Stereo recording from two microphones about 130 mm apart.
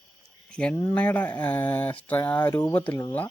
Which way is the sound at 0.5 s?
10° left (ahead or behind).